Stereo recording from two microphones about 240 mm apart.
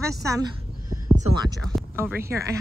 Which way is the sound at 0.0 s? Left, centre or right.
Centre.